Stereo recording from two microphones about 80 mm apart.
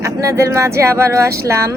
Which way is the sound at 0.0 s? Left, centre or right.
Right.